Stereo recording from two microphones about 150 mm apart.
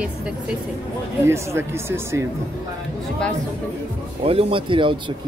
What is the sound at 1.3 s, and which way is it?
Speech, 15° right (ahead or behind).